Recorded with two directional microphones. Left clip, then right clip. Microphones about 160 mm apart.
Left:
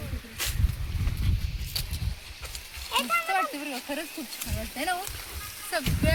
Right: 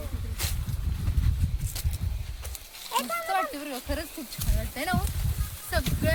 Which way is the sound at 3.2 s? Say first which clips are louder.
Left 1 dB; 10° right (ahead or behind).